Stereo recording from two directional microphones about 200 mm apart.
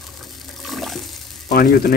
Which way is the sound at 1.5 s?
50° left (ahead or behind).